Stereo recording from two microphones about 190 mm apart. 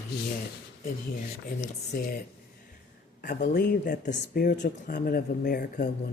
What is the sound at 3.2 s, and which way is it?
Speech, 45° left (ahead or behind).